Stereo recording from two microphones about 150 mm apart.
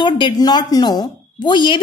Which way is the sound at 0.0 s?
30° left (ahead or behind).